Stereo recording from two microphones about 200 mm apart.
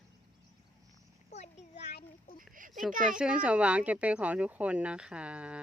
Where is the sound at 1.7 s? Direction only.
55° left (ahead or behind).